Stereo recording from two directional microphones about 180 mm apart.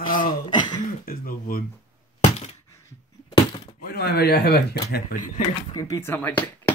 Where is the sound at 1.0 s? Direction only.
50° left (ahead or behind).